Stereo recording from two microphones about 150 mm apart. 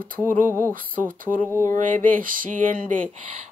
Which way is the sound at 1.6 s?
65° right (ahead or behind).